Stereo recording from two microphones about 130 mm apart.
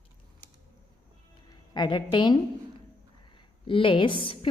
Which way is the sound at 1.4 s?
35° left (ahead or behind).